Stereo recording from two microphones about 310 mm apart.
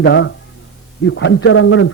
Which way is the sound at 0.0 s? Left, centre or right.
Left.